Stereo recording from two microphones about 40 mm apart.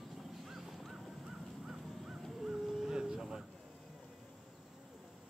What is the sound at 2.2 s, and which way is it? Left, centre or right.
Caw, centre.